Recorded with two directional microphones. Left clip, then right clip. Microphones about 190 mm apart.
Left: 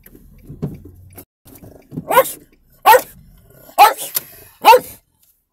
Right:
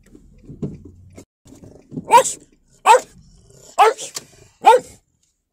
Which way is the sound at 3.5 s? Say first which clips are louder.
Left 4 dB; 10° left (ahead or behind).